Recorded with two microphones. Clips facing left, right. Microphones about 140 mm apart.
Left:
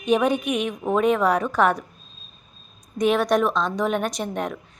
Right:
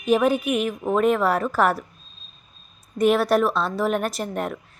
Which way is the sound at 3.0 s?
5° right (ahead or behind).